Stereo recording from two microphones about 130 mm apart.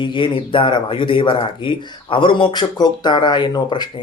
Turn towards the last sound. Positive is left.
turn(degrees=35)  # may be behind; listen again after turning